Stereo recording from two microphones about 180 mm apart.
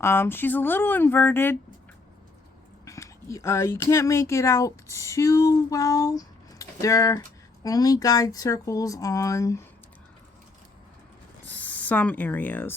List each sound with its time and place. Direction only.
0.0 s speech: 15° left (ahead or behind)
2.8 s speech: 15° left (ahead or behind)
11.4 s speech: 10° left (ahead or behind)